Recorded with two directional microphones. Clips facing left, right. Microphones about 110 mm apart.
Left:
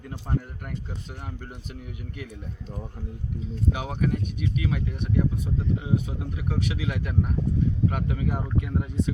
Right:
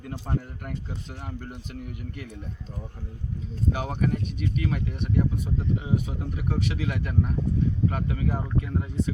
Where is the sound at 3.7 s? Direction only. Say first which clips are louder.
Right 1 dB; 10° left (ahead or behind).